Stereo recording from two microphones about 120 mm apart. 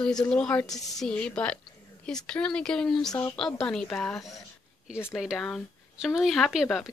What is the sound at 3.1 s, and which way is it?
Speech, 30° left (ahead or behind).